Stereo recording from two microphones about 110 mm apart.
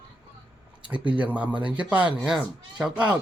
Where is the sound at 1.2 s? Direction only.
15° right (ahead or behind).